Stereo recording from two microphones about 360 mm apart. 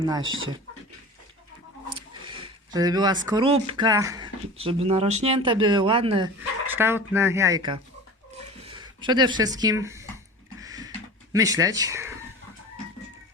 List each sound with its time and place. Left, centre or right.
0.2 s speech: right
2.0 s speech: centre
10.6 s a sound: centre